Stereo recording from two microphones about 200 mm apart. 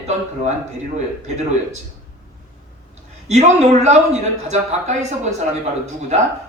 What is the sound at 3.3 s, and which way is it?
A man's voice, 35° right (ahead or behind).